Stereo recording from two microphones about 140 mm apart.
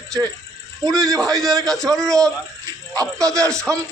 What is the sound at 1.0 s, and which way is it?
A man's voice, 5° left (ahead or behind).